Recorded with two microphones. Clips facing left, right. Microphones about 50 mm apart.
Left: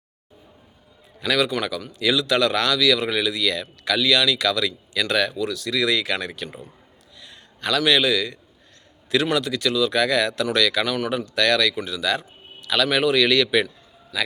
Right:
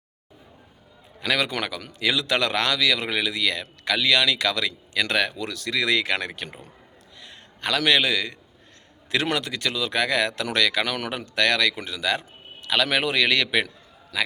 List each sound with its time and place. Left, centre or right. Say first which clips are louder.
1.2 s a man's voice: left 3 dB; right
11.3 s a man's voice: left 1 dB; right
14.1 s a man's voice: even; right